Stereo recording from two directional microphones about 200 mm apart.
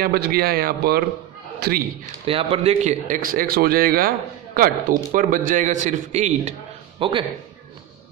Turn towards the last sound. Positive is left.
turn(degrees=-25)  # may be behind; listen again after turning